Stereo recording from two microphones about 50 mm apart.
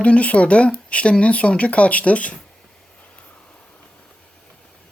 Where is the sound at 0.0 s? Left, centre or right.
Left.